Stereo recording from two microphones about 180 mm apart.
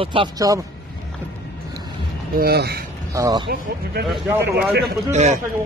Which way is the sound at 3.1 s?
20° right (ahead or behind).